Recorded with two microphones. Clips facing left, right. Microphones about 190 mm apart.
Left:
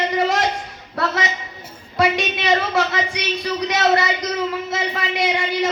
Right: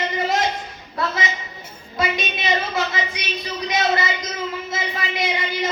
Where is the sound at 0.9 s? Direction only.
70° left (ahead or behind).